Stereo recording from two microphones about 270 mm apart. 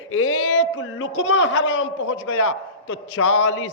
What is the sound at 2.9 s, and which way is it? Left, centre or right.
Speech, left.